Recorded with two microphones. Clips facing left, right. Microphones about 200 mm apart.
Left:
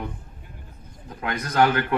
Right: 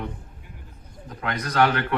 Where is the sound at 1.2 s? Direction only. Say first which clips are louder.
Left 1 dB; 25° left (ahead or behind).